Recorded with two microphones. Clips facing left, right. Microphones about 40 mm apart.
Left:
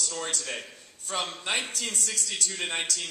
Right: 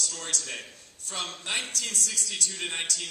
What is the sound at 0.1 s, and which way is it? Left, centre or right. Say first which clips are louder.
Speech: left 2 dB; left.